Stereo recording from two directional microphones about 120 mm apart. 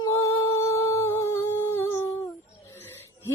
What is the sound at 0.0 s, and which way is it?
Humming, 25° left (ahead or behind).